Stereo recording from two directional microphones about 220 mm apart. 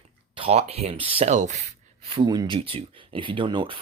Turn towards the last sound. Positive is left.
turn(degrees=-20)  # may be behind; listen again after turning